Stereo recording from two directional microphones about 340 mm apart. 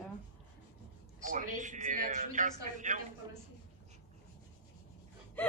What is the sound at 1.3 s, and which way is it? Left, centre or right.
A man's voice, right.